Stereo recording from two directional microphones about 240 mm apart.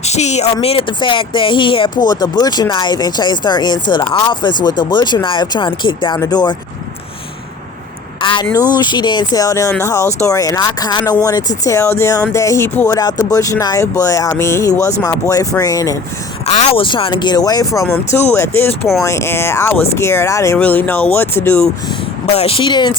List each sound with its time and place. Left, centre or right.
0.0 s speech: left
8.2 s speech: centre
16.5 s speech: left; by 21.6 s centre
22.3 s speech: left